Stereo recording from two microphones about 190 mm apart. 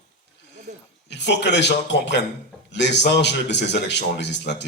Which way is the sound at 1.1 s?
65° left (ahead or behind).